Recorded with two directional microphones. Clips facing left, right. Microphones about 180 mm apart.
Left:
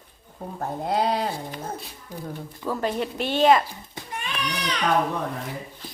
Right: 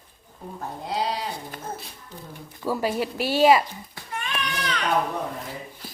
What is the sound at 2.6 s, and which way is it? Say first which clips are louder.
A woman's voice: right 1 dB; 10° right (ahead or behind).